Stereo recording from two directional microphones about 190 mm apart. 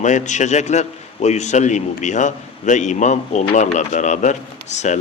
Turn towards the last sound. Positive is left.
turn(degrees=40)  # may be behind; listen again after turning